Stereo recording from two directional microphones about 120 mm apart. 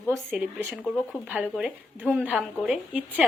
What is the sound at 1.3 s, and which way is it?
Speech, 5° right (ahead or behind).